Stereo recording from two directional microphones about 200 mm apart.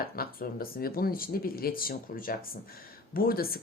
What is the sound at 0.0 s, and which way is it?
Speech, 50° left (ahead or behind).